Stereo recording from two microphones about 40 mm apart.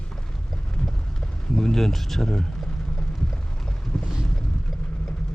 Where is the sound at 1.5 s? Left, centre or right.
Centre.